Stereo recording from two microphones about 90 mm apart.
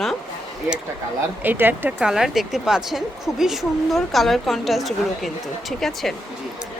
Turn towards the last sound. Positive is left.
turn(degrees=0)  # may be behind; listen again after turning